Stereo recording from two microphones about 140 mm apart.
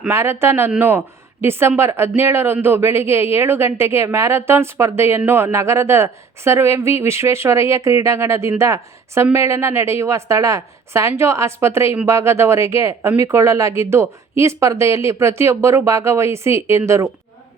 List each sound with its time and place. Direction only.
0.1 s speech: 20° right (ahead or behind)